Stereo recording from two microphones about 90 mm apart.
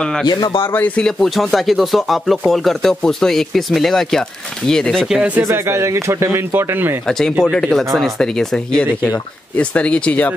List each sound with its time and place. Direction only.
0.3 s speech: 60° left (ahead or behind)
0.7 s speech: 15° left (ahead or behind)
1.0 s speech: 5° left (ahead or behind)
5.5 s a man's voice: 30° right (ahead or behind)
7.1 s speech: 5° left (ahead or behind)